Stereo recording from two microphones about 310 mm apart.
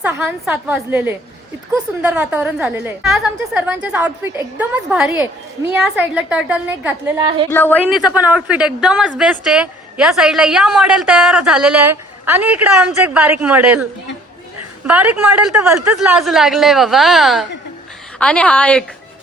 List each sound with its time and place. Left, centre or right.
0.0 s a woman's voice: centre
14.8 s a woman's voice: centre